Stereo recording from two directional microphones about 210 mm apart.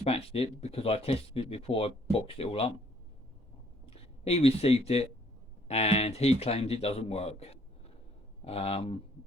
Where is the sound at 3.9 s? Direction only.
30° left (ahead or behind).